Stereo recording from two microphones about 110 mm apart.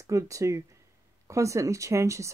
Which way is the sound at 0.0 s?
30° right (ahead or behind).